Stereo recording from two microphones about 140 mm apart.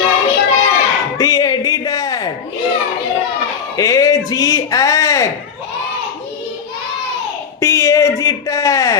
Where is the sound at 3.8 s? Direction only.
25° left (ahead or behind).